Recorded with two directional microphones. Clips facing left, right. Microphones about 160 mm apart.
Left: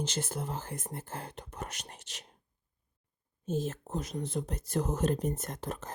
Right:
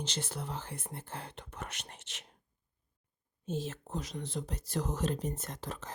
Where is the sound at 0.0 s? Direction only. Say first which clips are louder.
Left 4 dB; 45° left (ahead or behind).